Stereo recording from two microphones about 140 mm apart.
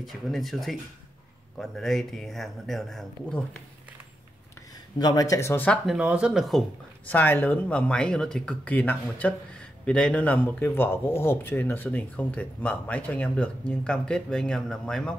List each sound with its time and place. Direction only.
0.0 s speech: centre (ahead or behind)
4.9 s speech: 30° left (ahead or behind)
5.9 s speech: 10° right (ahead or behind)
7.1 s speech: 10° left (ahead or behind)